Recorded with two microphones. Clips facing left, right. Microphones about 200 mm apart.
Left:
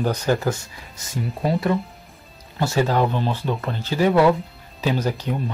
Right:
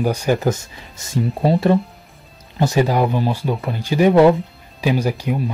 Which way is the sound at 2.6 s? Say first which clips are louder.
Right 3 dB; 15° right (ahead or behind).